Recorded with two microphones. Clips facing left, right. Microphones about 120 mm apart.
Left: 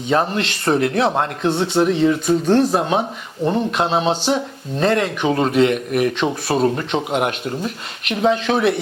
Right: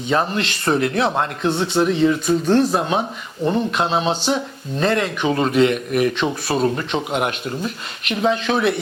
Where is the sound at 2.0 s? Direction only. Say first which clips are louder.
Left 1 dB; 35° left (ahead or behind).